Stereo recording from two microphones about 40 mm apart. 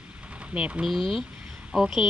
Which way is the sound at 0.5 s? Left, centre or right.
Right.